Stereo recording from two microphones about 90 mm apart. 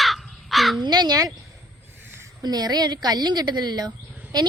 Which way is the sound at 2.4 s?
50° right (ahead or behind).